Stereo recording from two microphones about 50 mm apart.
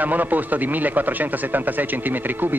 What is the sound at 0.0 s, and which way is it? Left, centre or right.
Speech, right.